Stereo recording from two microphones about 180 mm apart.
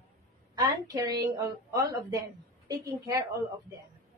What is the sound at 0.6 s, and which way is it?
A woman's voice, 20° right (ahead or behind).